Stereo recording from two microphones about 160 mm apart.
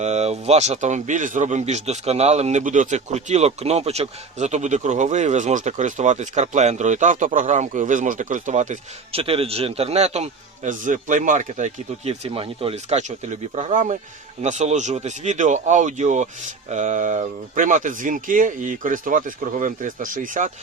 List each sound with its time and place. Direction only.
0.0 s speech: 45° right (ahead or behind)